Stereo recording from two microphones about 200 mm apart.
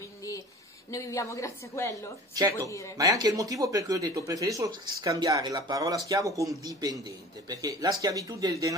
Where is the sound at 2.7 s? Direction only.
15° left (ahead or behind).